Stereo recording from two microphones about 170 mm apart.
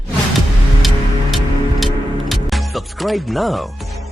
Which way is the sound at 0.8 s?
Centre (ahead or behind).